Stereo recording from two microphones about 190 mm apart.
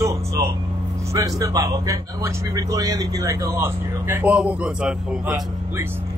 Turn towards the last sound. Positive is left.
turn(degrees=-5)  # may be behind; listen again after turning